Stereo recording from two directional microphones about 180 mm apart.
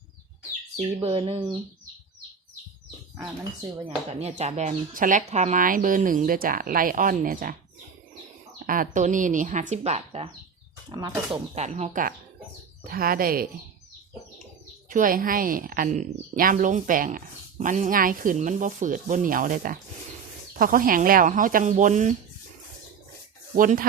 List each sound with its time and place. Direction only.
1.0 s speech: 35° right (ahead or behind)
3.8 s a woman's voice: 35° right (ahead or behind)
8.5 s a woman's voice: 50° right (ahead or behind)
10.8 s speech: 25° right (ahead or behind)
11.5 s a woman's voice: 40° right (ahead or behind); by 13.5 s 55° right (ahead or behind)
14.8 s a woman's voice: 50° right (ahead or behind)
23.6 s a woman's voice: 50° right (ahead or behind)